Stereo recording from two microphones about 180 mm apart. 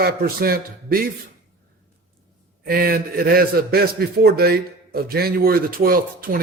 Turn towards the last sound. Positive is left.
turn(degrees=-55)  # may be behind; listen again after turning